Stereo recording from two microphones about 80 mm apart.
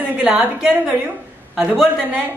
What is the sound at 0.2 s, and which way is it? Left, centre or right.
Speech, centre.